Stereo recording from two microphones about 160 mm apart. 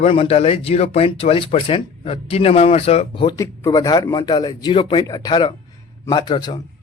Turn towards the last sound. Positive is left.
turn(degrees=30)  # may be behind; listen again after turning